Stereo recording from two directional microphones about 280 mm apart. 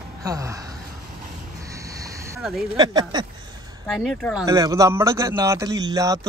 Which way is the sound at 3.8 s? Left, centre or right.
Centre.